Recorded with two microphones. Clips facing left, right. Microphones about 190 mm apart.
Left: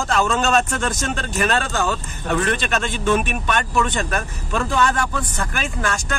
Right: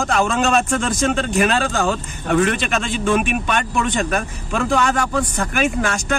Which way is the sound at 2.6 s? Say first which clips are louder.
Right 1 dB; 5° right (ahead or behind).